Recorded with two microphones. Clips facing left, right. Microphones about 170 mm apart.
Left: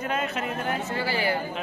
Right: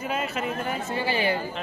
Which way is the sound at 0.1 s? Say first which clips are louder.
Right 2 dB; centre (ahead or behind).